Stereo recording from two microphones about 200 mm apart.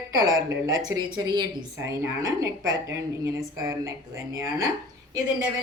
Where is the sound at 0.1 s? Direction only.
20° right (ahead or behind).